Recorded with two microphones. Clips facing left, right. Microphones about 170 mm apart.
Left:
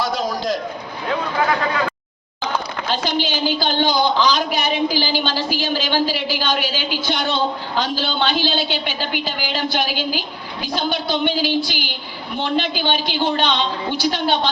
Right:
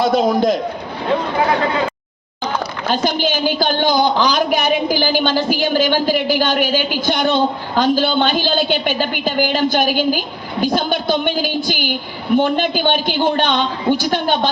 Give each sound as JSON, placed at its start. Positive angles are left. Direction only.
{"t": 0.0, "sound": "a man's voice", "side_deg": -55}
{"t": 2.9, "sound": "a woman's voice", "side_deg": -50}